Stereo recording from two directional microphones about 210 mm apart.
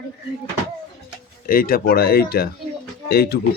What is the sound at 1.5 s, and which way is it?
Speech, 45° left (ahead or behind).